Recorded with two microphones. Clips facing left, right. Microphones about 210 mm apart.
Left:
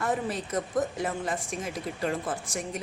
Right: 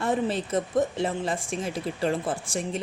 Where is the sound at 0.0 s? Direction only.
25° right (ahead or behind).